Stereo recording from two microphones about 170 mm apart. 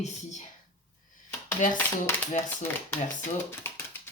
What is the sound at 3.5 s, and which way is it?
Typewriter, 15° left (ahead or behind).